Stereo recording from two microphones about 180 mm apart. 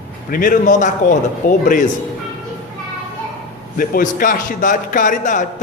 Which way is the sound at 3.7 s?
50° left (ahead or behind).